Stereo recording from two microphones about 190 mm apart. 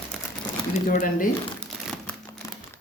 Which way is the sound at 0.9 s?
45° left (ahead or behind).